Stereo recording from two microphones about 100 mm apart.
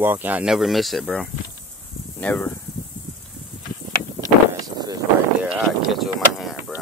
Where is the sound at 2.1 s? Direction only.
15° left (ahead or behind).